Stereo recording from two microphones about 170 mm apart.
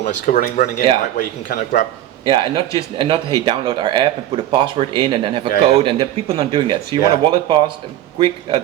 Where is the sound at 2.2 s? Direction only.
25° right (ahead or behind).